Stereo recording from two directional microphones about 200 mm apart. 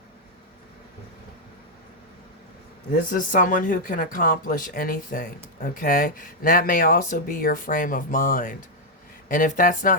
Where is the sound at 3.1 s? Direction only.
45° left (ahead or behind).